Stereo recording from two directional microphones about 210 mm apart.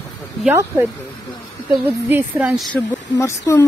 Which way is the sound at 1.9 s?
10° right (ahead or behind).